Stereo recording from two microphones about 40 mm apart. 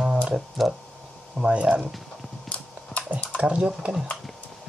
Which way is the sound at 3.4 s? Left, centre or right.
Right.